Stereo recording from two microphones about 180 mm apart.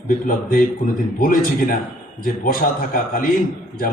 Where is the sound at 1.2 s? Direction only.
50° left (ahead or behind).